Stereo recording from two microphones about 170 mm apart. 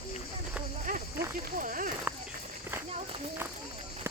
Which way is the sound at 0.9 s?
50° right (ahead or behind).